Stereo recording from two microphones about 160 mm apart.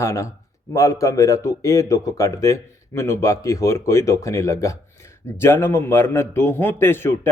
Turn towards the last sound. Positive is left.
turn(degrees=15)  # may be behind; listen again after turning